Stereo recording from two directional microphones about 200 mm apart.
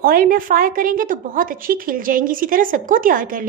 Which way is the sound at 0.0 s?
45° right (ahead or behind).